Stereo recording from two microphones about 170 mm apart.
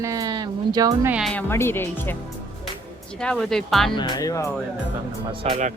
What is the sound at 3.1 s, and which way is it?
Speech, 5° left (ahead or behind).